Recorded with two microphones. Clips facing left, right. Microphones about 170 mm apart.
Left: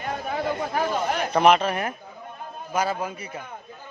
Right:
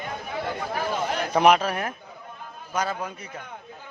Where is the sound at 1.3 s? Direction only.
5° right (ahead or behind).